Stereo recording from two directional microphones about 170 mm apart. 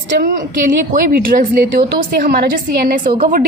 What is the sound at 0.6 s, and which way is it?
A woman's voice, 50° right (ahead or behind).